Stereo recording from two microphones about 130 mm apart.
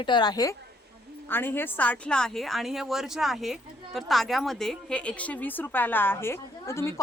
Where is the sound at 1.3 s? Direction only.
15° left (ahead or behind).